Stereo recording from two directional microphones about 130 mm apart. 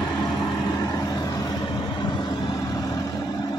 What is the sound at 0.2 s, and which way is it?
Vehicle, 30° left (ahead or behind).